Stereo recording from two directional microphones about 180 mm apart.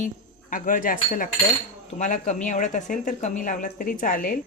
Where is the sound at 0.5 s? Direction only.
50° left (ahead or behind).